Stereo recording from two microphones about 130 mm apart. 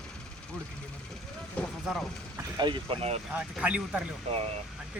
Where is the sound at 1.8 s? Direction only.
Centre (ahead or behind).